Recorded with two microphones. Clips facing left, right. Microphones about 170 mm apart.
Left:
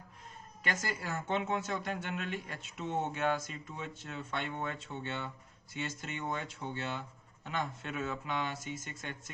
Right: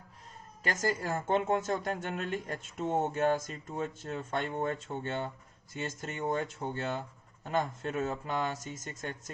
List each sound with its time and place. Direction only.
0.6 s a woman's voice: 40° right (ahead or behind)